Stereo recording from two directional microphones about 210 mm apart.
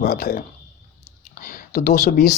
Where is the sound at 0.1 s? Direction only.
50° left (ahead or behind).